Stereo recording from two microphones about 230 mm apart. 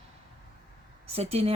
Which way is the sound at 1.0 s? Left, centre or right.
Right.